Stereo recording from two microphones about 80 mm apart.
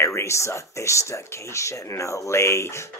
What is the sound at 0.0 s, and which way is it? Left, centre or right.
Speech, left.